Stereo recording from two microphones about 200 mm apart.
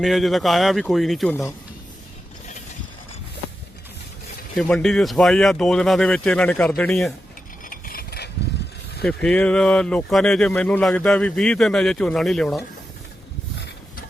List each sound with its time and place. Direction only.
0.0 s speech: centre (ahead or behind)
4.5 s speech: 5° left (ahead or behind)
7.6 s a sound: 45° left (ahead or behind)
9.0 s speech: 5° left (ahead or behind)